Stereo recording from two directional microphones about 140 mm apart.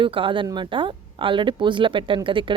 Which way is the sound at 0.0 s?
40° right (ahead or behind).